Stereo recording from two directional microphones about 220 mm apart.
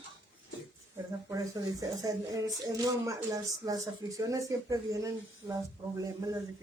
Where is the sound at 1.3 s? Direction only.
15° right (ahead or behind).